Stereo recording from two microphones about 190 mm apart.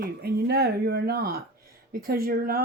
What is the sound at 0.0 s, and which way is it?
Speech, 60° right (ahead or behind).